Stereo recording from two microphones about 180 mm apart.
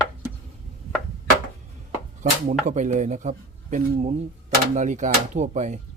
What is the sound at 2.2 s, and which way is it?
Speech, 40° right (ahead or behind).